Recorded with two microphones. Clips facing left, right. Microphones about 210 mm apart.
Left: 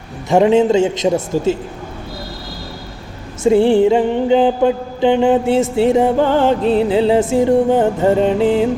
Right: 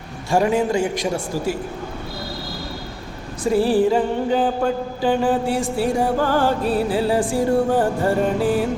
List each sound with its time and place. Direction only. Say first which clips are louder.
0.3 s mantra: left 7 dB; 20° left (ahead or behind)
3.4 s mantra: left 6 dB; 25° left (ahead or behind)